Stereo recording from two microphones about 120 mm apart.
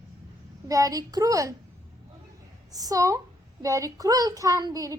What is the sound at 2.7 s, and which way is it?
A child's voice, 30° right (ahead or behind).